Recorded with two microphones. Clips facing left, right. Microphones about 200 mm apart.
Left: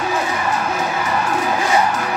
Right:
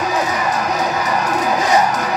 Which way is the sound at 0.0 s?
40° right (ahead or behind).